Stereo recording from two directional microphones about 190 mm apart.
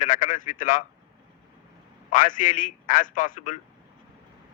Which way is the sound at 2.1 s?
45° left (ahead or behind).